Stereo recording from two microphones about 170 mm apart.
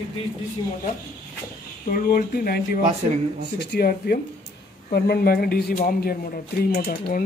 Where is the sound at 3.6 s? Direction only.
70° left (ahead or behind); by 7.2 s 55° left (ahead or behind).